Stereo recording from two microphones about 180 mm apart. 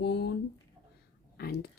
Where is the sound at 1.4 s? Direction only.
60° left (ahead or behind).